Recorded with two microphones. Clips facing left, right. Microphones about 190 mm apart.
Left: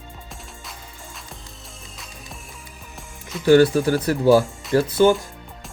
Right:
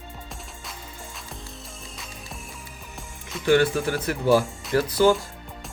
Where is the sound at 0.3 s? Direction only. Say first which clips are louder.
Even; centre (ahead or behind).